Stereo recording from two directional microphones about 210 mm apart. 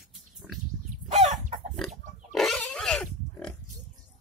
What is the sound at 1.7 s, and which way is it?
Pig, centre (ahead or behind).